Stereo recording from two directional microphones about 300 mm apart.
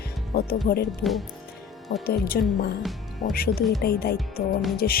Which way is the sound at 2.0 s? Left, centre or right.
Left.